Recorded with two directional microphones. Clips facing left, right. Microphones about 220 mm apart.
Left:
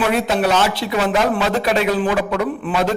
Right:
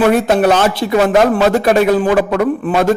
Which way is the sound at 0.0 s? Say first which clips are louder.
Right 7 dB; 50° right (ahead or behind).